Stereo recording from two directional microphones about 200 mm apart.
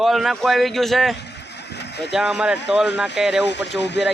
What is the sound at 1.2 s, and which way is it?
Vehicle, 60° left (ahead or behind).